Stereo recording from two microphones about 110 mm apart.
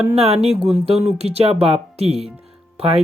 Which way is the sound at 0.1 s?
65° right (ahead or behind).